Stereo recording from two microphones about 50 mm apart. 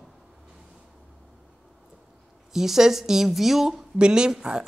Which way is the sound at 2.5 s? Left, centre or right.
Centre.